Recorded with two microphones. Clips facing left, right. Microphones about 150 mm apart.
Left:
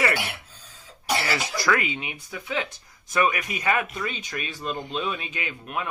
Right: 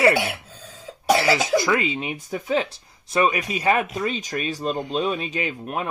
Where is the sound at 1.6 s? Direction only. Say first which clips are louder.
Right 3 dB; 25° right (ahead or behind).